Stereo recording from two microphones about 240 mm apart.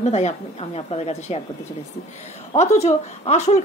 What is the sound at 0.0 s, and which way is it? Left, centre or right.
A woman's voice, left.